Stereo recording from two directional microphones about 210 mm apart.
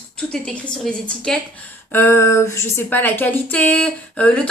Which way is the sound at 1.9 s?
10° left (ahead or behind).